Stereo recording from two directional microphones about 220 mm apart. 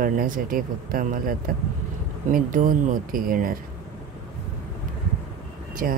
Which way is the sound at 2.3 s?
40° right (ahead or behind).